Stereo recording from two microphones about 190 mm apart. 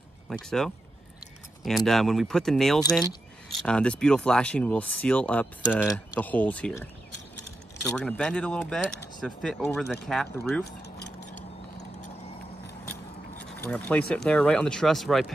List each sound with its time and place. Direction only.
0.3 s speech: 5° left (ahead or behind)
1.9 s speech: centre (ahead or behind)
10.6 s keys jangling: 60° left (ahead or behind)
13.4 s speech: 5° left (ahead or behind)